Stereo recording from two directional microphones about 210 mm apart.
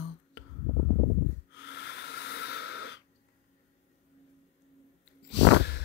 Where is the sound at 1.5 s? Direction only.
55° left (ahead or behind).